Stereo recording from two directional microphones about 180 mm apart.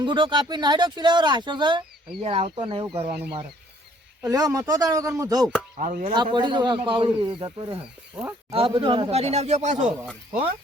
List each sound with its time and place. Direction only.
0.0 s speech: 25° right (ahead or behind)
4.2 s speech: 20° right (ahead or behind)
5.7 s speech: 40° right (ahead or behind)
6.1 s speech: 25° right (ahead or behind)
7.8 s speech: 5° right (ahead or behind)
8.5 s speech: 30° right (ahead or behind)
10.1 s speech: 5° right (ahead or behind)